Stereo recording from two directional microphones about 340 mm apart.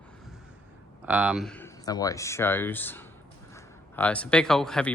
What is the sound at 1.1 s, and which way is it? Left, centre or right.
Speech, centre.